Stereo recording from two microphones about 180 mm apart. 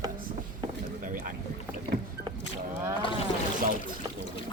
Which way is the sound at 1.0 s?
50° right (ahead or behind).